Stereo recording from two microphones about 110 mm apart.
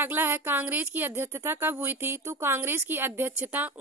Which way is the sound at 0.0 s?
20° right (ahead or behind).